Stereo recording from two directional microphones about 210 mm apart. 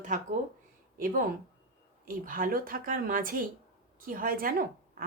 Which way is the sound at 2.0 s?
40° right (ahead or behind).